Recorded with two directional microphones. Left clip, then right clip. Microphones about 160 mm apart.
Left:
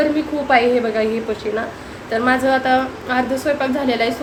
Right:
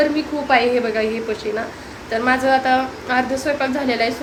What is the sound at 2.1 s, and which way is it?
A woman's voice, centre (ahead or behind).